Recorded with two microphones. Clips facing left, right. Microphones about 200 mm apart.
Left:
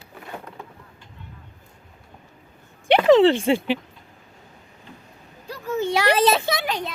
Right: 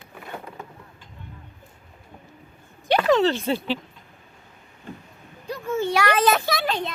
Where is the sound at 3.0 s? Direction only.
20° left (ahead or behind).